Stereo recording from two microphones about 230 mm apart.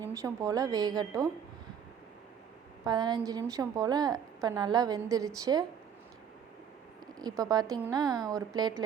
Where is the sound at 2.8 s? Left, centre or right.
Centre.